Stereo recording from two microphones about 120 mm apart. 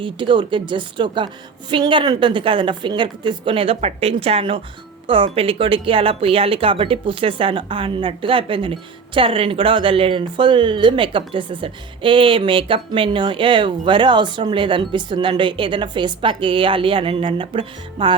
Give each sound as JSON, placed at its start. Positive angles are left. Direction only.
{"t": 0.0, "sound": "speech", "side_deg": -40}